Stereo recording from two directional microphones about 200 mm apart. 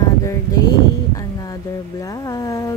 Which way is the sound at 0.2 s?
15° left (ahead or behind).